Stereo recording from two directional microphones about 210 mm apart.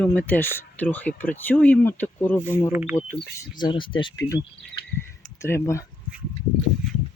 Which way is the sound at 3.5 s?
20° left (ahead or behind).